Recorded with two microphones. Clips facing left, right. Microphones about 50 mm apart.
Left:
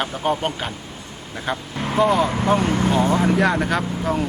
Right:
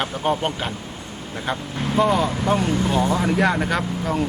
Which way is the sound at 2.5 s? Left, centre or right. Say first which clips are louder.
Left 2 dB; left.